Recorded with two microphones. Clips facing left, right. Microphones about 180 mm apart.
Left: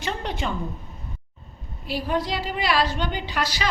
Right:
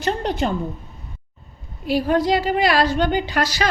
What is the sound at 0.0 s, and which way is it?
Speech, 40° right (ahead or behind).